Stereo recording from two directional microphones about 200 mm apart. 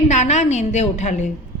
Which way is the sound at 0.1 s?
35° left (ahead or behind).